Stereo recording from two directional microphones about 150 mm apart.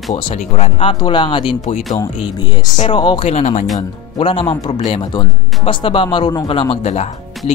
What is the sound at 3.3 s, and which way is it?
Speech, 50° left (ahead or behind).